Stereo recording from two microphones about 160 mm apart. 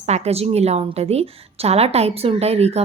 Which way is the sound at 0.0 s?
40° right (ahead or behind).